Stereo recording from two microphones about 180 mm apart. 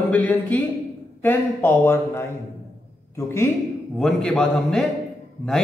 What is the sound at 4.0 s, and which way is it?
Speech, 5° left (ahead or behind).